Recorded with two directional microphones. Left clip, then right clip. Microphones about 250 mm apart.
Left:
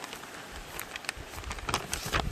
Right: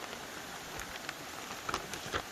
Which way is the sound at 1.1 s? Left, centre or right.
Left.